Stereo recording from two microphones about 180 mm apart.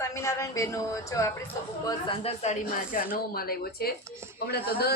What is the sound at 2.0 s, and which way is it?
A man's voice, 35° left (ahead or behind).